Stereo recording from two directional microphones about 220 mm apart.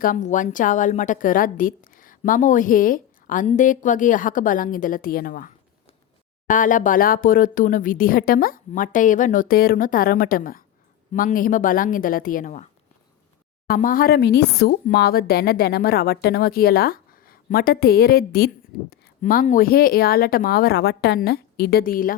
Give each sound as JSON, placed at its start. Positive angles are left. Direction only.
{"t": 0.0, "sound": "a woman's voice", "side_deg": 35}
{"t": 13.7, "sound": "speech", "side_deg": 40}